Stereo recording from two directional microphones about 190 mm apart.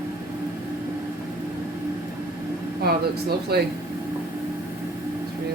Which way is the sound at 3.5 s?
55° right (ahead or behind).